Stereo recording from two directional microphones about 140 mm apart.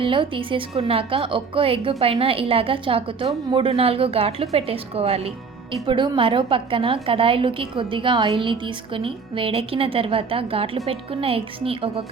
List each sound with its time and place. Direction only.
0.0 s a woman's voice: 35° right (ahead or behind)